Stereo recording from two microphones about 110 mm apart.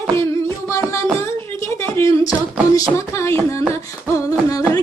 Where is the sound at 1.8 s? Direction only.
25° left (ahead or behind).